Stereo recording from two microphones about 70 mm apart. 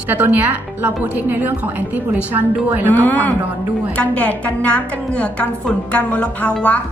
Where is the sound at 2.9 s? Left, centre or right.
Left.